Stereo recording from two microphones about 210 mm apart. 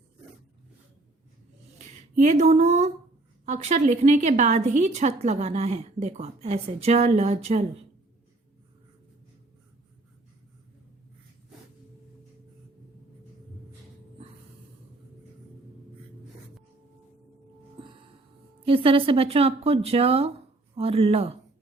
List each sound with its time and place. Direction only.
2.1 s a woman's voice: 35° right (ahead or behind)
17.8 s a sound: 25° right (ahead or behind)
18.6 s speech: 25° right (ahead or behind)